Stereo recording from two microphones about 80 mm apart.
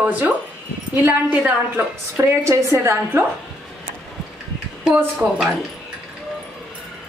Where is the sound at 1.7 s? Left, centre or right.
Right.